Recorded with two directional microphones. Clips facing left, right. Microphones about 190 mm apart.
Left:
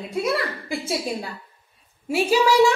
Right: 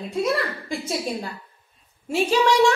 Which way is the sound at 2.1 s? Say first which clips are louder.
Left 1 dB; 5° left (ahead or behind).